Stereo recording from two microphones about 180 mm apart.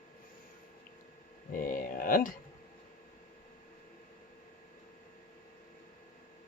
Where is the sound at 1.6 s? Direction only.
50° left (ahead or behind).